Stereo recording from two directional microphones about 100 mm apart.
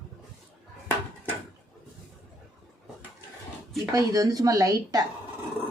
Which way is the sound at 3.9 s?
40° right (ahead or behind).